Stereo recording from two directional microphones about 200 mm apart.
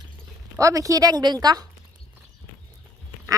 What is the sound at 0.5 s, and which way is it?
A woman's voice, 15° right (ahead or behind).